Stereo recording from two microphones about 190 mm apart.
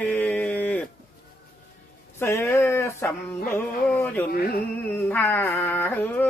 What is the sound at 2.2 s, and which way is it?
Speech, 10° left (ahead or behind).